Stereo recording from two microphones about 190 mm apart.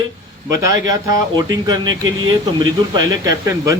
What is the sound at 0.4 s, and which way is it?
A man's voice, 15° right (ahead or behind).